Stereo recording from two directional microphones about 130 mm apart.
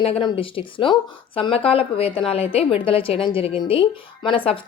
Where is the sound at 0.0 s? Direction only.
40° left (ahead or behind).